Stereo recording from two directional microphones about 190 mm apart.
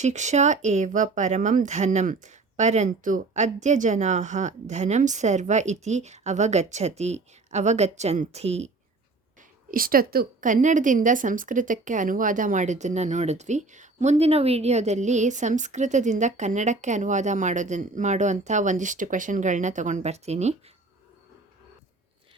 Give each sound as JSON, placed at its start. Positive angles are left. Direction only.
{"t": 0.0, "sound": "a woman's voice", "side_deg": -40}
{"t": 9.7, "sound": "a woman's voice", "side_deg": -50}